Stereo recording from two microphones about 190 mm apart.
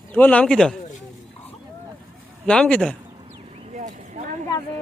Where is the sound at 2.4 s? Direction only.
5° left (ahead or behind).